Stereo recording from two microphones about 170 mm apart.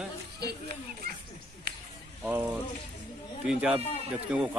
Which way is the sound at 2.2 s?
10° right (ahead or behind).